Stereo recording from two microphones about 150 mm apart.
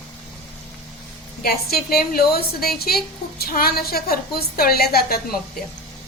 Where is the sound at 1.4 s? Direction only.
90° left.